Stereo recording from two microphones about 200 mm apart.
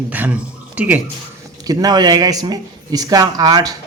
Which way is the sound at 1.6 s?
20° right (ahead or behind).